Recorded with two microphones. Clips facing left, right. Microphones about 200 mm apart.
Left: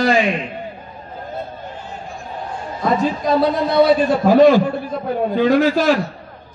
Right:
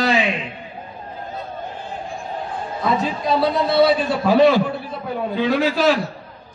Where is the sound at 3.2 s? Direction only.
45° left (ahead or behind).